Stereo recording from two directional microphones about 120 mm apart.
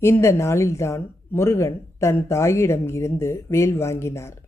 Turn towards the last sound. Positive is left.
turn(degrees=25)  # may be behind; listen again after turning